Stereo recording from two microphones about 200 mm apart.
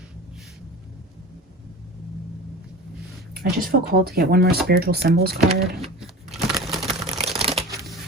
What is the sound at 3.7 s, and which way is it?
Speech, 45° right (ahead or behind).